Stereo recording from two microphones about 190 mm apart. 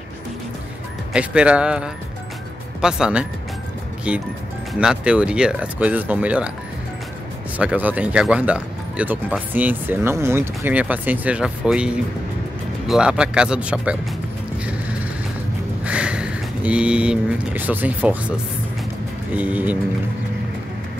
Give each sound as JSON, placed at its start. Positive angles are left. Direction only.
{"t": 1.1, "sound": "speech", "side_deg": -5}
{"t": 7.5, "sound": "speech", "side_deg": -10}
{"t": 15.8, "sound": "speech", "side_deg": -5}
{"t": 19.3, "sound": "speech", "side_deg": -10}